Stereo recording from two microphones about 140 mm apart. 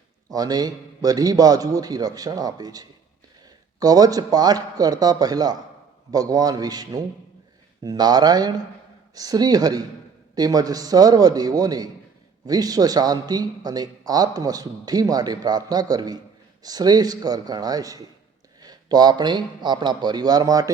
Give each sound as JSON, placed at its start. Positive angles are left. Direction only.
{"t": 0.3, "sound": "a man's voice", "side_deg": -25}